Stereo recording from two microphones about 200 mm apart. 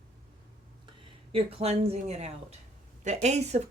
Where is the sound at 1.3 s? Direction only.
30° right (ahead or behind).